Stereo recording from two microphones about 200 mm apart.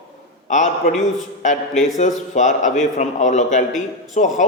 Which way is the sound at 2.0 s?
35° left (ahead or behind).